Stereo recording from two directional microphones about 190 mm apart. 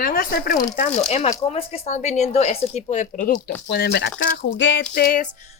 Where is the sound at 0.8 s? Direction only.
35° left (ahead or behind).